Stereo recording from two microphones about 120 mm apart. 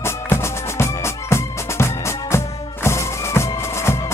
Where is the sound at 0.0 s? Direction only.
20° left (ahead or behind).